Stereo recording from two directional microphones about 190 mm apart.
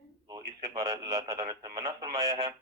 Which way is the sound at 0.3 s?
25° right (ahead or behind).